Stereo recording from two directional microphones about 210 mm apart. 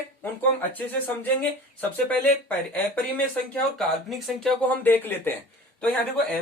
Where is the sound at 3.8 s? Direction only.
Centre (ahead or behind).